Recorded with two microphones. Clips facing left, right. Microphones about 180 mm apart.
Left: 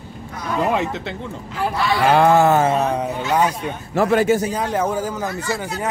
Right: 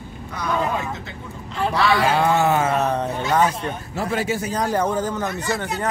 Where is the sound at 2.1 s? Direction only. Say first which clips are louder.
Left 5 dB; 55° left (ahead or behind).